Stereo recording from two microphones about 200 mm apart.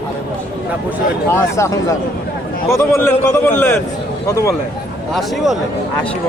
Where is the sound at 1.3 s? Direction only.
15° left (ahead or behind).